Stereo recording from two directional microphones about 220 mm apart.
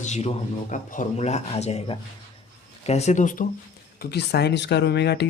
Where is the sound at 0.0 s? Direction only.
30° left (ahead or behind).